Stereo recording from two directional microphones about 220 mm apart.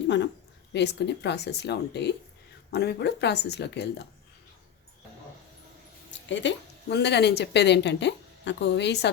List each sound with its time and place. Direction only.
0.7 s speech: 50° left (ahead or behind)
6.1 s speech: 55° left (ahead or behind)